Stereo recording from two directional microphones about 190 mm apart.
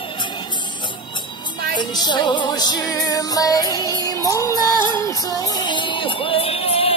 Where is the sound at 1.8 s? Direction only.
25° left (ahead or behind).